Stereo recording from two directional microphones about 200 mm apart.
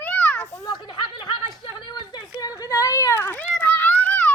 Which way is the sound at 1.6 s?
20° left (ahead or behind).